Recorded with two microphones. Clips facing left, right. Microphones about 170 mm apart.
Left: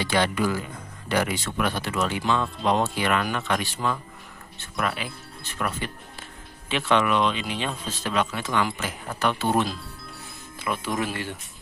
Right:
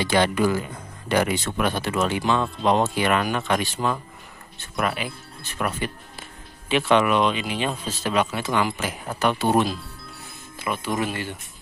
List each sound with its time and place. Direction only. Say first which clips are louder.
0.0 s speech: right 3 dB; 20° right (ahead or behind)
5.6 s speech: right 3 dB; 10° right (ahead or behind)
10.6 s speech: right 2 dB; centre (ahead or behind)